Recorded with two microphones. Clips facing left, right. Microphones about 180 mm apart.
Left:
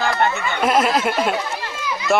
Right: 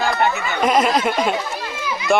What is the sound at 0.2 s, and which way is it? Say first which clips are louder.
Speech: right 1 dB; centre (ahead or behind).